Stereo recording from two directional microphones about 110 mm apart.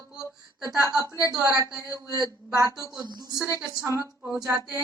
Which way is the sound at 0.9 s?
30° left (ahead or behind).